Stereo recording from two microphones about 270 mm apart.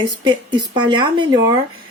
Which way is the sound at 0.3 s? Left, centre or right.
Centre.